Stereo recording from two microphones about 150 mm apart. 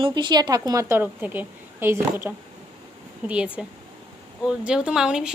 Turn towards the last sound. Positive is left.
turn(degrees=-5)  # may be behind; listen again after turning